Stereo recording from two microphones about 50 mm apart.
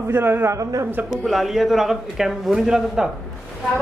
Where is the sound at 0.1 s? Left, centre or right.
Right.